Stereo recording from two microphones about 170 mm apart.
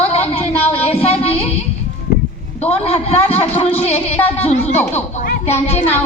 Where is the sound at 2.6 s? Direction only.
35° left (ahead or behind).